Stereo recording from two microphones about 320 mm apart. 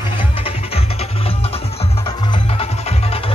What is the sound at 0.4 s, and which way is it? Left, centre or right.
Music, centre.